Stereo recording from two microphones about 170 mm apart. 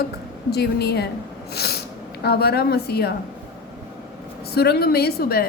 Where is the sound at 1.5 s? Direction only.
70° left (ahead or behind).